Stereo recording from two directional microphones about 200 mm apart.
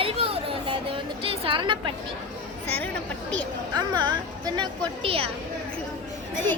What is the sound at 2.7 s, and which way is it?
Chatter, 5° left (ahead or behind).